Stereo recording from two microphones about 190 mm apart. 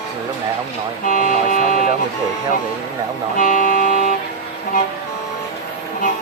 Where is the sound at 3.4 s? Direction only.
45° left (ahead or behind).